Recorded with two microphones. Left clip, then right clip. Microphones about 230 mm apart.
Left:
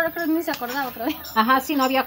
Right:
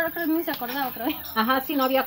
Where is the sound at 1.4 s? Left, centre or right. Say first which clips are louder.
Left 4 dB; left.